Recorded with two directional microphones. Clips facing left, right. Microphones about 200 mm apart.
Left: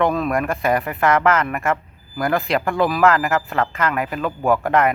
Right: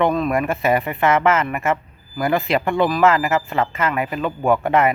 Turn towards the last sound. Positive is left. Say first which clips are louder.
# right 1 dB
turn(degrees=0)  # may be behind; listen again after turning